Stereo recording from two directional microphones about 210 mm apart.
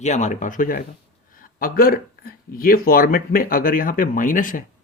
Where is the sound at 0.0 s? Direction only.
35° left (ahead or behind).